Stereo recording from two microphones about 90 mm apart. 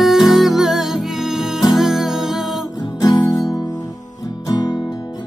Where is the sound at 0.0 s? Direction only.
Centre (ahead or behind).